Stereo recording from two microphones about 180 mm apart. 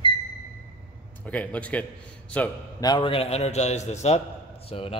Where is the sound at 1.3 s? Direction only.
5° left (ahead or behind).